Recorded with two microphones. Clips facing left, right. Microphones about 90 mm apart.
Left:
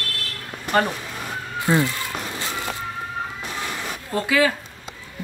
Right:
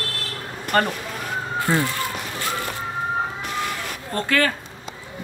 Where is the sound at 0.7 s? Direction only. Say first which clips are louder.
Even; 5° left (ahead or behind).